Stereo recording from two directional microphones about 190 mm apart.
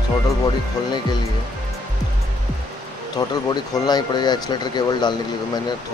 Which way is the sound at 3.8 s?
20° left (ahead or behind).